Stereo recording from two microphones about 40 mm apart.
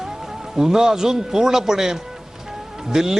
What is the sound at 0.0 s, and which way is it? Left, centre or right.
A man's voice, centre.